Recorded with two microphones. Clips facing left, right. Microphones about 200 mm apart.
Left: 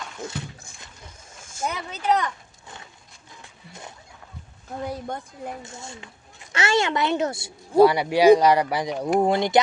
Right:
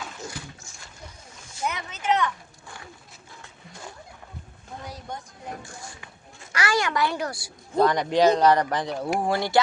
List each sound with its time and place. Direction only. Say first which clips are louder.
0.3 s a sound: left 5 dB; 55° left (ahead or behind)
1.6 s speech: left 2 dB; 35° left (ahead or behind)
4.8 s speech: left 8 dB; 55° left (ahead or behind)
5.6 s speech: left 3 dB; 25° left (ahead or behind)
7.8 s speech: left 4 dB; 10° left (ahead or behind)